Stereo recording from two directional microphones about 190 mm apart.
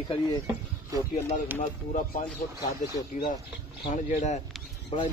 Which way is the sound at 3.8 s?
40° left (ahead or behind).